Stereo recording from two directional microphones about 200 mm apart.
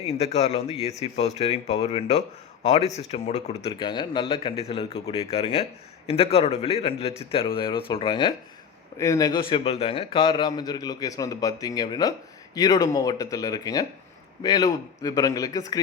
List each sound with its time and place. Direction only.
0.0 s a man's voice: 35° left (ahead or behind); by 15.8 s 20° left (ahead or behind)